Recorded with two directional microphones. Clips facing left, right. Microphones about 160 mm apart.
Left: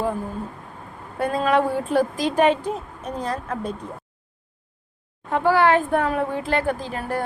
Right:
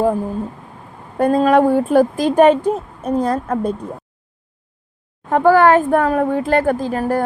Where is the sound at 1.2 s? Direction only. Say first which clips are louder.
Right 7 dB; 45° right (ahead or behind).